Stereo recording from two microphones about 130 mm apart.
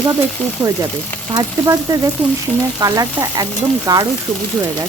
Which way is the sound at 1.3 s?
25° right (ahead or behind).